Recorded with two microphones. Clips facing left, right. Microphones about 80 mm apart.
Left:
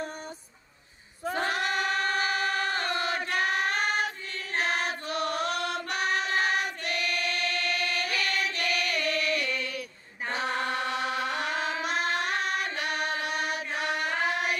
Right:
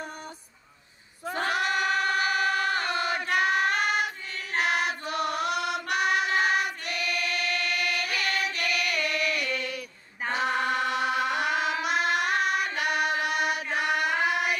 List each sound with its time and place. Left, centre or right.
1.8 s choir: centre
3.8 s choir: left
4.5 s choir: centre
7.0 s chant: left
8.2 s music: centre
8.5 s chant: left
9.1 s chant: centre